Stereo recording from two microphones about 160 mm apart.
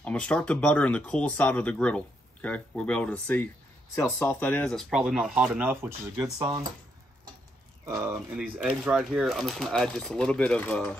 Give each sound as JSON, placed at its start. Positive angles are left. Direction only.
{"t": 0.0, "sound": "speech", "side_deg": 5}
{"t": 7.8, "sound": "speech", "side_deg": -15}